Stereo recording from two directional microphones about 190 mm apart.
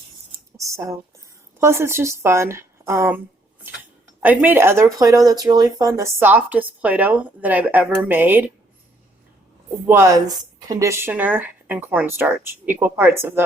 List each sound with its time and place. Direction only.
0.5 s speech: 15° right (ahead or behind)
4.2 s speech: 10° right (ahead or behind)
9.8 s speech: 15° right (ahead or behind)